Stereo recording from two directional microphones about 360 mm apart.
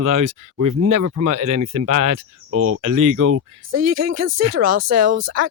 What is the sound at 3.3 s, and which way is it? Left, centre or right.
Speech, right.